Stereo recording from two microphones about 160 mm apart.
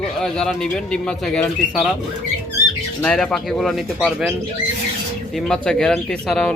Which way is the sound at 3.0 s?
5° left (ahead or behind).